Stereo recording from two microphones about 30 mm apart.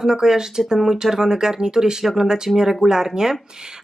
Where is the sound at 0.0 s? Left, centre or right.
Centre.